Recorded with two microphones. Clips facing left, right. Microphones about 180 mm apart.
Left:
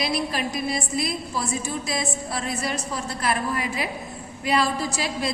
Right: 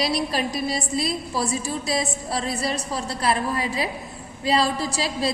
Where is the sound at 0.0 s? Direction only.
35° right (ahead or behind).